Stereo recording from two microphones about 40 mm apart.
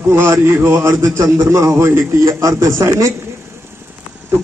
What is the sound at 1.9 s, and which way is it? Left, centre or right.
Speech, right.